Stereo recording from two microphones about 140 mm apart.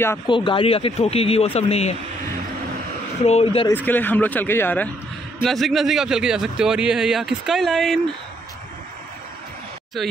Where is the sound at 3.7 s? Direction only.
15° left (ahead or behind).